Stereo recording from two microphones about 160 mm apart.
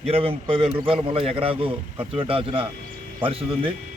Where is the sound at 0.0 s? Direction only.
35° right (ahead or behind).